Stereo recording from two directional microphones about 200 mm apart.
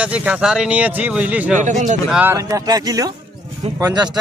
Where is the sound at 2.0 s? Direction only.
10° right (ahead or behind).